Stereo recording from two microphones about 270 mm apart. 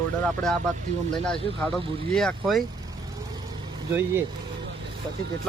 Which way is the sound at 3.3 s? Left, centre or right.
Centre.